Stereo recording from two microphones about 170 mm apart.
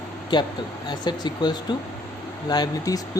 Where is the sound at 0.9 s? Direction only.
25° left (ahead or behind).